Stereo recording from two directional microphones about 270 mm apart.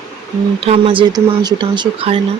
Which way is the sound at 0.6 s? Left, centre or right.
Right.